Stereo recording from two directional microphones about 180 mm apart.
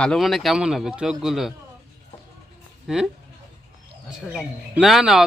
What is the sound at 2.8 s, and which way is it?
Speech, centre (ahead or behind).